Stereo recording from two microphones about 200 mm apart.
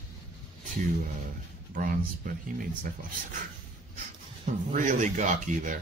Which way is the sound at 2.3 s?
45° right (ahead or behind).